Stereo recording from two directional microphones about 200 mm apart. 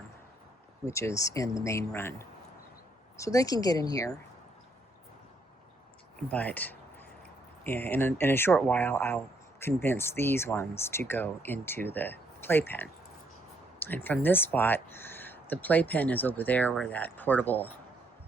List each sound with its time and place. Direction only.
0.9 s speech: 15° left (ahead or behind)
6.1 s speech: 10° left (ahead or behind)